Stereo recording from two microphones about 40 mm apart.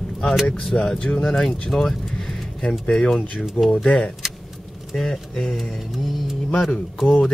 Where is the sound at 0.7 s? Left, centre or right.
Left.